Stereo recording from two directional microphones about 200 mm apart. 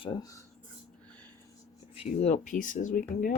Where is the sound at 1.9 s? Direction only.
30° left (ahead or behind).